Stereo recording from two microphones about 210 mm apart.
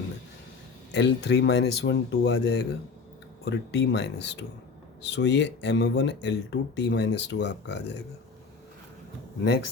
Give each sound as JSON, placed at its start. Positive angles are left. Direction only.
{"t": 0.9, "sound": "speech", "side_deg": 55}